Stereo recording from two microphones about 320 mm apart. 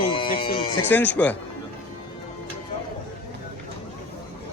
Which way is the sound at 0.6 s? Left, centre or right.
Centre.